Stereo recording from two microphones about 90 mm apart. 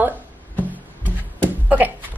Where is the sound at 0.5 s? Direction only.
20° right (ahead or behind).